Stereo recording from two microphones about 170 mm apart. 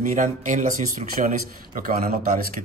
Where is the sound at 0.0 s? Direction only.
45° right (ahead or behind).